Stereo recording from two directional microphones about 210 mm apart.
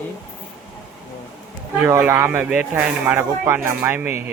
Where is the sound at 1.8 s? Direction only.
10° right (ahead or behind).